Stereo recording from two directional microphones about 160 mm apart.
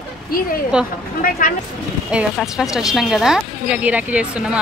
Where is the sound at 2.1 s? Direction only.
5° right (ahead or behind).